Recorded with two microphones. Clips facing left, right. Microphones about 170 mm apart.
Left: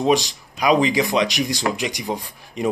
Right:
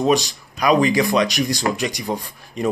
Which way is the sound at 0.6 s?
15° left (ahead or behind).